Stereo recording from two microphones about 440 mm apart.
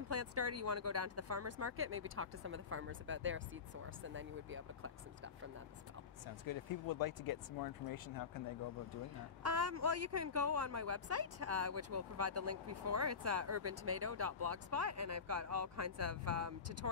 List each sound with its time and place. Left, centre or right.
0.1 s speech: right
6.5 s speech: left
9.4 s speech: right